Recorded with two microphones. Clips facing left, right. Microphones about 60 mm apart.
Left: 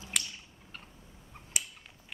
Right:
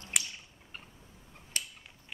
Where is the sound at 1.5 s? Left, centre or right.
Centre.